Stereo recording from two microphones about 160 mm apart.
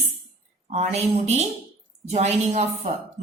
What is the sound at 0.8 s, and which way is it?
A woman's voice, 40° right (ahead or behind).